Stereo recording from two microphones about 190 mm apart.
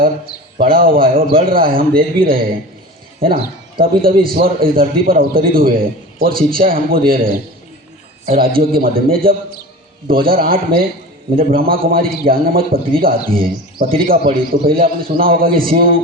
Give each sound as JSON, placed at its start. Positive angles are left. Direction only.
{"t": 0.6, "sound": "a man's voice", "side_deg": -50}
{"t": 8.3, "sound": "a man's voice", "side_deg": -50}